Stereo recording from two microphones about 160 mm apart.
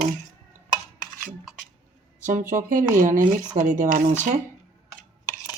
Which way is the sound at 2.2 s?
55° right (ahead or behind).